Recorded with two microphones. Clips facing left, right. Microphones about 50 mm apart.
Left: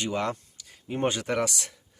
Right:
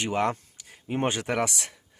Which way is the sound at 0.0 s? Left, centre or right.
Right.